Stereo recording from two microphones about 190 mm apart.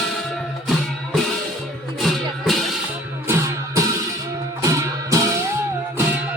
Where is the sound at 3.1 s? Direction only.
15° right (ahead or behind).